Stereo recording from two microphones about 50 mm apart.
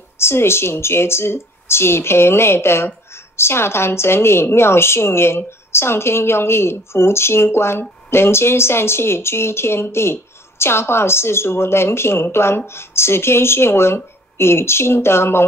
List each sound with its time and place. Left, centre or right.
0.2 s speech: left